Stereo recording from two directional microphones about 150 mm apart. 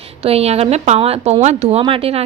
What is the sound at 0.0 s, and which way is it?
A woman's voice, 40° right (ahead or behind).